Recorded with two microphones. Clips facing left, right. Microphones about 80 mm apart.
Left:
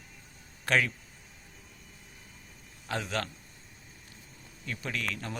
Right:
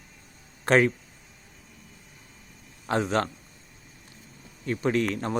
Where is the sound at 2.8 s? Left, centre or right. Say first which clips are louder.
Right 8 dB; right.